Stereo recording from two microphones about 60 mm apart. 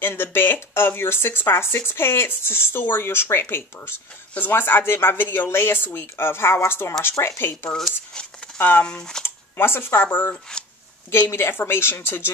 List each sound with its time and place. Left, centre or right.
0.0 s speech: left
7.7 s speech: centre
8.5 s speech: left
8.8 s speech: centre
9.2 s speech: left
9.9 s speech: left
10.5 s speech: centre
11.1 s speech: left